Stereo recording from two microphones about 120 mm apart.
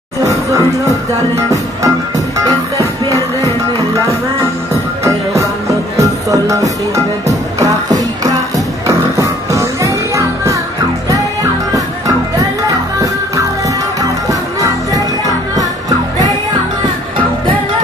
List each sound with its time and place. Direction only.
0.5 s music: 25° right (ahead or behind)
5.0 s music: 25° right (ahead or behind)
12.4 s music: 30° right (ahead or behind)